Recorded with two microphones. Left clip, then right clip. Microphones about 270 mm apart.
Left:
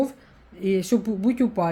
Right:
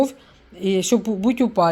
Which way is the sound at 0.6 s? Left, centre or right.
Centre.